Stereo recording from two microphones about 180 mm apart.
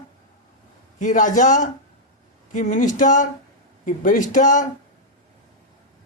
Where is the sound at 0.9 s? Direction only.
45° left (ahead or behind).